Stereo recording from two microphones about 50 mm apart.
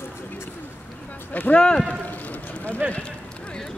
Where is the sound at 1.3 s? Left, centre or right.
Left.